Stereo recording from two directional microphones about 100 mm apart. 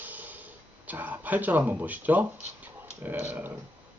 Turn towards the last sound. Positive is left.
turn(degrees=-20)  # may be behind; listen again after turning